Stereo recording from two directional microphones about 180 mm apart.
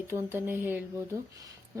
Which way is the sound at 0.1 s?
10° right (ahead or behind).